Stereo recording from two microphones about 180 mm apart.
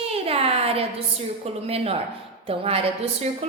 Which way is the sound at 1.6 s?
35° right (ahead or behind).